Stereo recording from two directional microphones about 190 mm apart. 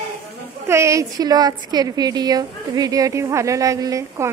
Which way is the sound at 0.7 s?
15° right (ahead or behind).